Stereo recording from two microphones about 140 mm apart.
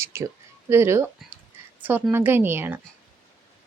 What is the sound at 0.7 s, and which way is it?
A woman's voice, 20° right (ahead or behind).